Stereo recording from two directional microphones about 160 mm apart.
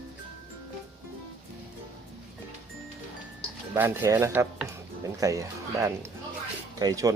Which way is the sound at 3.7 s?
15° right (ahead or behind).